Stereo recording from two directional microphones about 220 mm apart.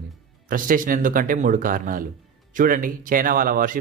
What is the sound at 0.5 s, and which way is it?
Speech, 40° right (ahead or behind).